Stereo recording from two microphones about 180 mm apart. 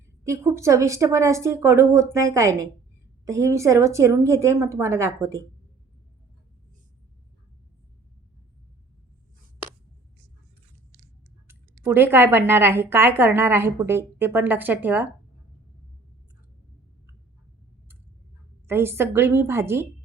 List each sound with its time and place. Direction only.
0.3 s a woman's voice: 15° right (ahead or behind)
11.4 s a woman's voice: 10° right (ahead or behind)
18.7 s a woman's voice: 15° right (ahead or behind)